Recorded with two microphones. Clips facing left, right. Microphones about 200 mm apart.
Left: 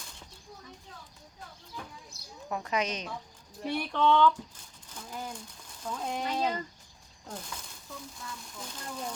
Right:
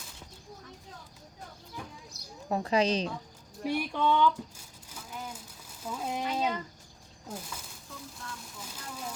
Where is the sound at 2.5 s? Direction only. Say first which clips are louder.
Right 5 dB; 30° right (ahead or behind).